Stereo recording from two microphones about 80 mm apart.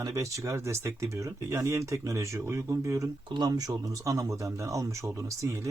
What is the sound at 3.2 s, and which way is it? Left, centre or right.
Speech, right.